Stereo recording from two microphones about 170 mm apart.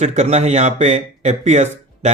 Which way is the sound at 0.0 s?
40° right (ahead or behind).